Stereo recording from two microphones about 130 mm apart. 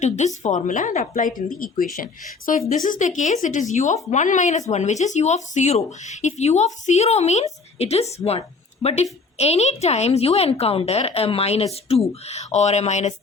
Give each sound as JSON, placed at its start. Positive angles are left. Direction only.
{"t": 0.4, "sound": "a woman's voice", "side_deg": 70}